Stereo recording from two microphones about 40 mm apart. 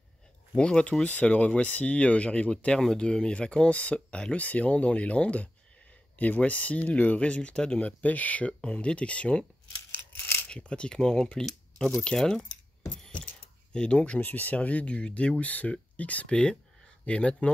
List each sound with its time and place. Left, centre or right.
0.6 s speech: left
1.3 s speech: left
4.4 s speech: left
7.2 s speech: left
7.8 s speech: left
8.5 s speech: left
9.8 s a sound: left
10.5 s speech: left
13.7 s speech: left
14.2 s speech: left
15.4 s speech: left
16.3 s speech: left